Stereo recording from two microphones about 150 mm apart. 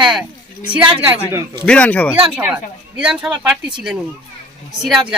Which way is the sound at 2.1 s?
5° right (ahead or behind).